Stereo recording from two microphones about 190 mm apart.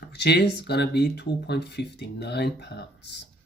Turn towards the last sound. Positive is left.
turn(degrees=60)  # may be behind; listen again after turning